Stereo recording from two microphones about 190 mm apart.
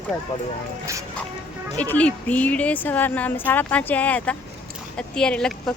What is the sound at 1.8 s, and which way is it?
Speech, 5° left (ahead or behind).